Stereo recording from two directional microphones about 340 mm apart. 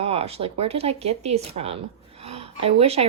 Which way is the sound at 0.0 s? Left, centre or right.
Centre.